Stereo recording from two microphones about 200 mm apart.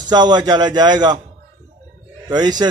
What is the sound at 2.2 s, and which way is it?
Speech, 20° right (ahead or behind).